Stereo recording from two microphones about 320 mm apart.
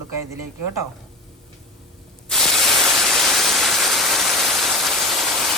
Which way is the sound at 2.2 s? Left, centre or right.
Centre.